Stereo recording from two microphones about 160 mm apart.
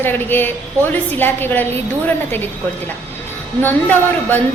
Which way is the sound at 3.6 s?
10° left (ahead or behind).